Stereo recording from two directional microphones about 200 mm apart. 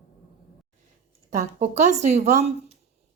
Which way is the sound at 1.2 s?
35° right (ahead or behind).